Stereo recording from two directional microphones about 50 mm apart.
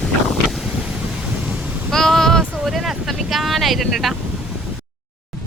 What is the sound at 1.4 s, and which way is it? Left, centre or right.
Waves, centre.